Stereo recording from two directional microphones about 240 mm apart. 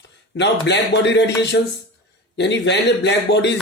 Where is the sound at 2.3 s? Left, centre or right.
Left.